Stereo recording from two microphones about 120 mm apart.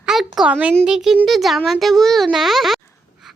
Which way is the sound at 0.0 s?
5° right (ahead or behind).